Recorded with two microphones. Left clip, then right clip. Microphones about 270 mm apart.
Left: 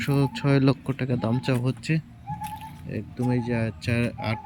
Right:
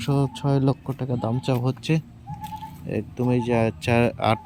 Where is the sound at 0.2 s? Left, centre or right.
Left.